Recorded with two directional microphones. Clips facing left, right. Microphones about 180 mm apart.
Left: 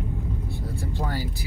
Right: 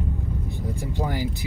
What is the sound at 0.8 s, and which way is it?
Vehicle, 15° right (ahead or behind).